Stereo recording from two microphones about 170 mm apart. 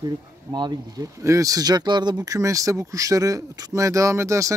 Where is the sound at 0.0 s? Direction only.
25° right (ahead or behind).